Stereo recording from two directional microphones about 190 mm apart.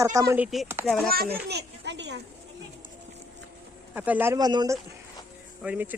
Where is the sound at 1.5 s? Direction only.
65° right (ahead or behind).